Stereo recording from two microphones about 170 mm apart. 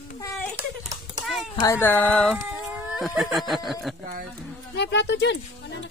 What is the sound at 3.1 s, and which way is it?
Snicker, centre (ahead or behind).